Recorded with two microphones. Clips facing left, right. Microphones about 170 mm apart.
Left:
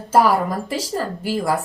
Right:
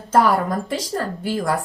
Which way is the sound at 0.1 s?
5° left (ahead or behind).